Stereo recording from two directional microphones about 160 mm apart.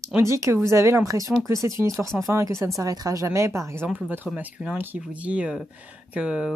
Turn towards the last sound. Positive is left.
turn(degrees=-5)  # may be behind; listen again after turning